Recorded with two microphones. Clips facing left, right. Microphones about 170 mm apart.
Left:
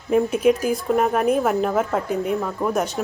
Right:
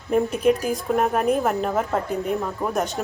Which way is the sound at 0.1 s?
Centre (ahead or behind).